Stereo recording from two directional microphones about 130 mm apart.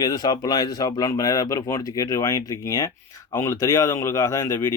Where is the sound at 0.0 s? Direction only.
30° left (ahead or behind).